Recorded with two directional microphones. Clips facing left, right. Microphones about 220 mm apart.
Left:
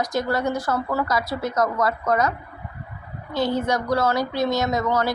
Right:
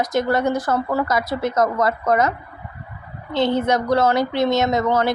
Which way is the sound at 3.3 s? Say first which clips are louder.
Right 4 dB; 20° right (ahead or behind).